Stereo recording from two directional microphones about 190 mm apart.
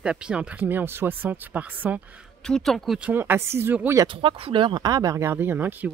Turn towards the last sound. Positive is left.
turn(degrees=-10)  # may be behind; listen again after turning